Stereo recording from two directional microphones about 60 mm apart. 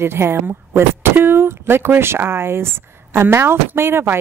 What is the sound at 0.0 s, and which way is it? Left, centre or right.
Speech, right.